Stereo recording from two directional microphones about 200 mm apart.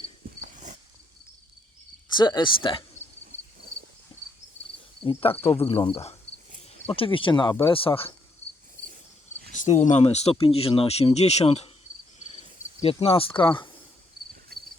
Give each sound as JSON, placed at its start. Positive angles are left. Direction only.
{"t": 0.4, "sound": "dog", "side_deg": -40}
{"t": 2.0, "sound": "speech", "side_deg": 20}
{"t": 5.0, "sound": "speech", "side_deg": 30}
{"t": 9.5, "sound": "speech", "side_deg": 35}
{"t": 12.8, "sound": "speech", "side_deg": 30}
{"t": 14.5, "sound": "cricket", "side_deg": -50}